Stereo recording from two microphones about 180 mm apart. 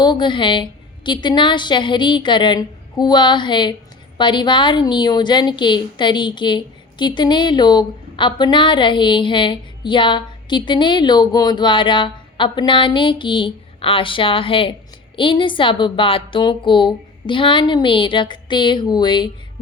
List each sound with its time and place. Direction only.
0.0 s a woman's voice: 25° left (ahead or behind)